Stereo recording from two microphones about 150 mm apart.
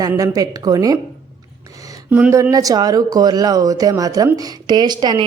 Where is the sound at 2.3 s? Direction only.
20° right (ahead or behind).